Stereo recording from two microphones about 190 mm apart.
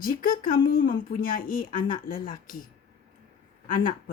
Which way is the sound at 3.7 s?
45° left (ahead or behind).